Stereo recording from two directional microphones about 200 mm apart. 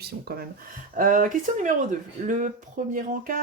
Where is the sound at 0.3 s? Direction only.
50° right (ahead or behind).